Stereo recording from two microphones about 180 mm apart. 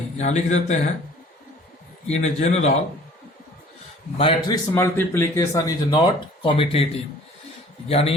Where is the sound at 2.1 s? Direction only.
40° left (ahead or behind).